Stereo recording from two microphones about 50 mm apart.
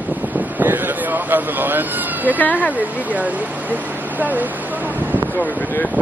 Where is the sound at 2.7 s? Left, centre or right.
Right.